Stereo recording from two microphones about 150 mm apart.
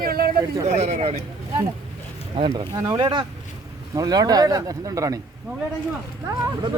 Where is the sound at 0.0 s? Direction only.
80° right.